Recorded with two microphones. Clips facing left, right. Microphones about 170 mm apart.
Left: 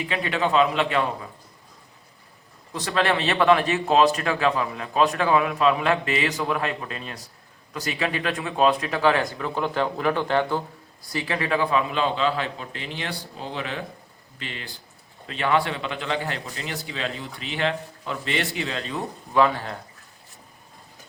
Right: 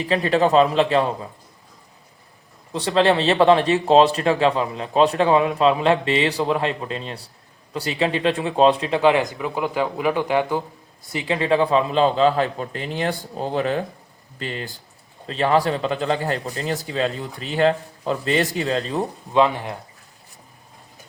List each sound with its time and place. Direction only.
0.0 s a man's voice: 35° right (ahead or behind)
2.7 s speech: 30° right (ahead or behind); by 10.6 s 10° right (ahead or behind)
11.1 s a man's voice: 20° right (ahead or behind)
19.3 s speech: 20° right (ahead or behind)